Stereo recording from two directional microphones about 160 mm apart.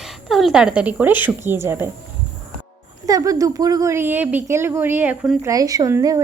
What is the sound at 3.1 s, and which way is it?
A woman's voice, 20° right (ahead or behind).